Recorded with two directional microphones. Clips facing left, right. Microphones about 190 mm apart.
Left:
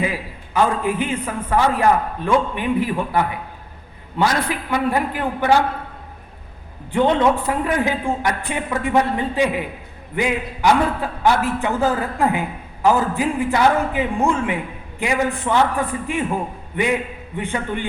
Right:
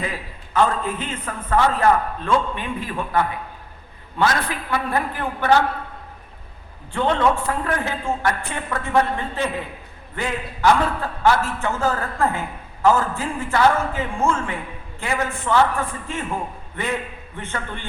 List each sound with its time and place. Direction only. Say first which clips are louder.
0.0 s a man's voice: left 5 dB; 10° left (ahead or behind)
6.9 s a man's voice: left 3 dB; 15° left (ahead or behind)